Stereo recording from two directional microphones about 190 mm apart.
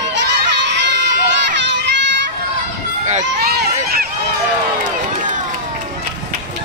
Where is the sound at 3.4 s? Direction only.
55° right (ahead or behind).